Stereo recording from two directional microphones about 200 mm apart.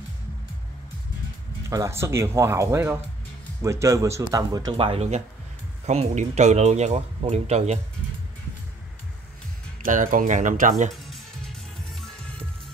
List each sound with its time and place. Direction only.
1.7 s speech: 15° right (ahead or behind); by 7.8 s 30° right (ahead or behind)
9.8 s speech: 40° right (ahead or behind)
11.9 s music: centre (ahead or behind)